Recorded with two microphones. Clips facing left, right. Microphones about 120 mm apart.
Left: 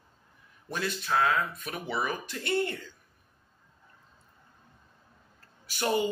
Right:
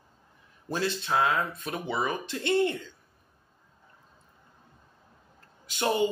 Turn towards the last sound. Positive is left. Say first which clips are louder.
# right 1 dB
turn(degrees=-25)  # may be behind; listen again after turning